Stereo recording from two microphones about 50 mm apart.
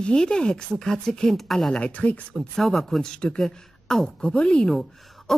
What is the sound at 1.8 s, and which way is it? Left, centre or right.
Speech, left.